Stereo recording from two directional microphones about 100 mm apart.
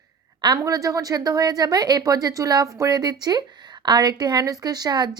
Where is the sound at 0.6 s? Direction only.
35° right (ahead or behind).